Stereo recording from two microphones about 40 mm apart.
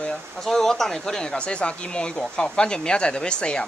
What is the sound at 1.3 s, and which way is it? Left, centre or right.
Speech, left.